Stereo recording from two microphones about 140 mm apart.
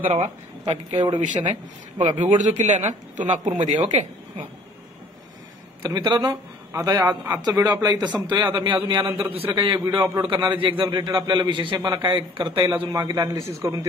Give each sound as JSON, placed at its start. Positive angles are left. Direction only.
{"t": 0.0, "sound": "speech", "side_deg": -50}
{"t": 0.7, "sound": "a man's voice", "side_deg": -35}
{"t": 1.2, "sound": "speech", "side_deg": -60}
{"t": 5.9, "sound": "a man's voice", "side_deg": -30}
{"t": 9.8, "sound": "a man's voice", "side_deg": -25}
{"t": 12.9, "sound": "a man's voice", "side_deg": -25}